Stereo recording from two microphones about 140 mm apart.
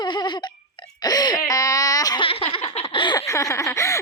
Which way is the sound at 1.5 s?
25° left (ahead or behind).